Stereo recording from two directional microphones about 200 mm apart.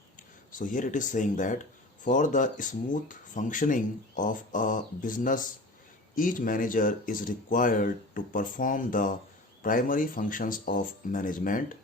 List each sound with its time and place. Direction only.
0.2 s speech: 40° left (ahead or behind)